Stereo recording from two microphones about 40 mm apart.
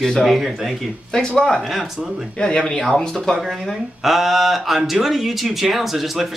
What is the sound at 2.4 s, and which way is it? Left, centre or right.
Speech, left.